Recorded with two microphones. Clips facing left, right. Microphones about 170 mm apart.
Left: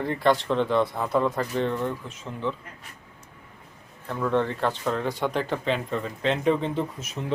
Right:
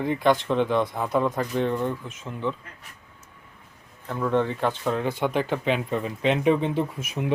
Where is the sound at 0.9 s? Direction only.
5° right (ahead or behind).